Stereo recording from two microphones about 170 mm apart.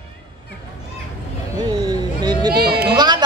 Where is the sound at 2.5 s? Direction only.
65° right (ahead or behind).